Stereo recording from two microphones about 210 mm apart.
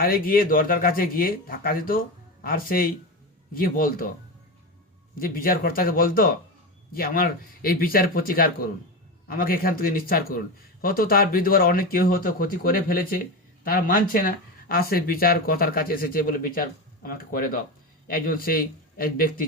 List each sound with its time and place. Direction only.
0.0 s a man's voice: 45° left (ahead or behind)
5.2 s a man's voice: 45° left (ahead or behind)